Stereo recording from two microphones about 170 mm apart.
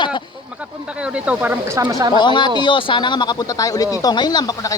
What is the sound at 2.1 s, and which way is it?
Speech, 25° left (ahead or behind).